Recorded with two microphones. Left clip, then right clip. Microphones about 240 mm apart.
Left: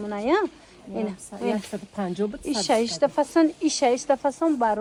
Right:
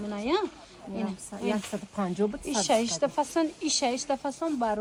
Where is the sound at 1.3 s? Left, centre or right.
Centre.